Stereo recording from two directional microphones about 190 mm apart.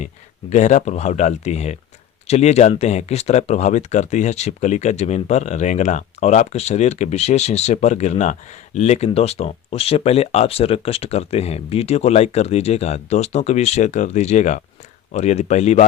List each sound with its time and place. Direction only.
0.5 s speech: 40° left (ahead or behind)